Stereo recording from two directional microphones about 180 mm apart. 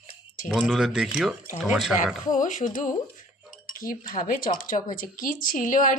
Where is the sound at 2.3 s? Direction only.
45° left (ahead or behind).